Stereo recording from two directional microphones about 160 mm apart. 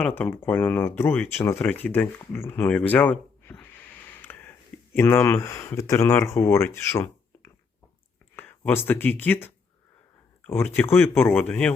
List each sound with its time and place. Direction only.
0.2 s speech: 15° left (ahead or behind)